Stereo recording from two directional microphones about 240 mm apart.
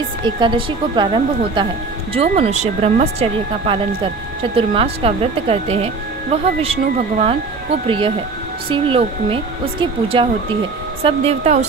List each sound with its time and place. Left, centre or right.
0.4 s speech: centre
8.6 s speech: right